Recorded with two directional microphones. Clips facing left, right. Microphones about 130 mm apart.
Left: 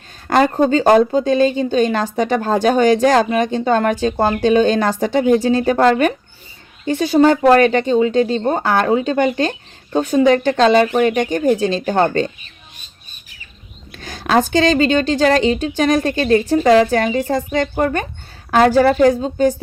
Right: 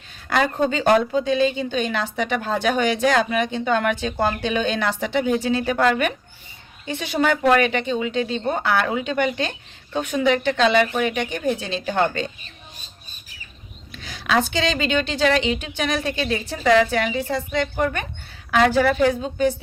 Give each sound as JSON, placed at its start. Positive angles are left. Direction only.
{"t": 0.3, "sound": "speech", "side_deg": 40}
{"t": 13.9, "sound": "a woman's voice", "side_deg": 45}